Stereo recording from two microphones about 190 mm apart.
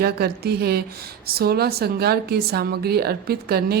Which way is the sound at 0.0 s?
55° right (ahead or behind).